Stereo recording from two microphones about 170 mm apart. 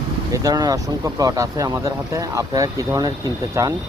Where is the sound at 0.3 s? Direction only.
20° right (ahead or behind).